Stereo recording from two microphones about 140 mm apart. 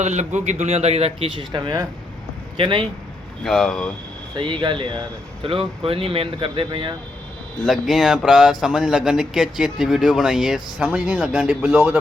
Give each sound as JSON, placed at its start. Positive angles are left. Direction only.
{"t": 0.0, "sound": "speech", "side_deg": -55}
{"t": 3.4, "sound": "speech", "side_deg": 0}
{"t": 4.4, "sound": "speech", "side_deg": -35}
{"t": 7.6, "sound": "speech", "side_deg": 0}